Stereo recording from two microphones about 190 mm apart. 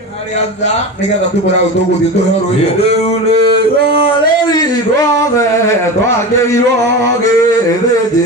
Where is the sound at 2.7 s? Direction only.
35° left (ahead or behind).